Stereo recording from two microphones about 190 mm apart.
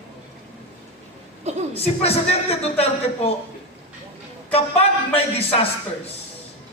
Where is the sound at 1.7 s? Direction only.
30° left (ahead or behind).